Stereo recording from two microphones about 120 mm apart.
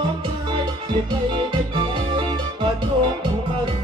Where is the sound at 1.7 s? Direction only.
40° right (ahead or behind).